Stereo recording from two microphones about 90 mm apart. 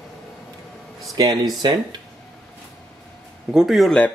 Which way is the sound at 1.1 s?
50° right (ahead or behind).